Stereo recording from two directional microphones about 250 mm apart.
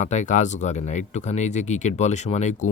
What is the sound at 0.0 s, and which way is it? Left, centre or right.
Speech, left.